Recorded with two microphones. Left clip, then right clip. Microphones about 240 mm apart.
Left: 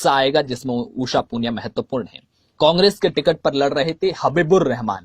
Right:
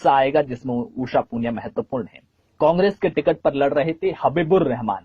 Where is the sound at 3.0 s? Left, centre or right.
Left.